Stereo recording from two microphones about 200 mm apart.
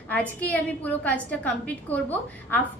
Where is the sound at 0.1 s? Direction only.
5° left (ahead or behind).